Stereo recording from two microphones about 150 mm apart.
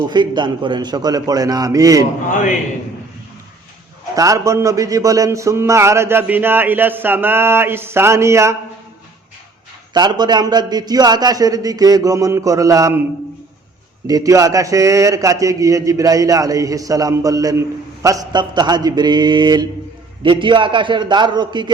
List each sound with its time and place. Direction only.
0.1 s a man's voice: 30° right (ahead or behind)
4.1 s a man's voice: 20° right (ahead or behind)
9.9 s a man's voice: 30° right (ahead or behind)
14.1 s a man's voice: 25° right (ahead or behind)